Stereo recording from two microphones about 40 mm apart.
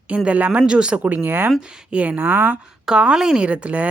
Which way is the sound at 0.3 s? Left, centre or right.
Right.